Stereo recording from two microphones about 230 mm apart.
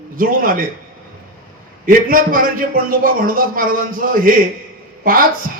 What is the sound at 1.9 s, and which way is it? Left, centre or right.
A man's voice, right.